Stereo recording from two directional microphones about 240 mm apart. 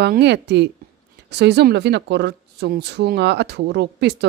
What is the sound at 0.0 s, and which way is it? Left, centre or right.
Speech, right.